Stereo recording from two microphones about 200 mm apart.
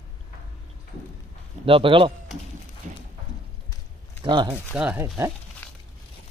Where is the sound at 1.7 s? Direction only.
25° right (ahead or behind).